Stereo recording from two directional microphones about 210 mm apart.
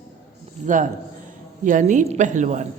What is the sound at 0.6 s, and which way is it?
A woman's voice, 35° right (ahead or behind).